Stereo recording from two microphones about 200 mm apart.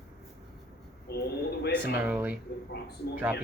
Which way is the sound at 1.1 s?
55° left (ahead or behind).